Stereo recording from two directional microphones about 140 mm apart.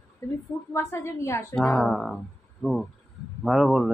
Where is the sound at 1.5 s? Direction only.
Centre (ahead or behind).